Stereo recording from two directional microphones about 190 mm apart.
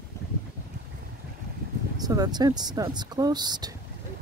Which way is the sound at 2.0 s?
20° right (ahead or behind).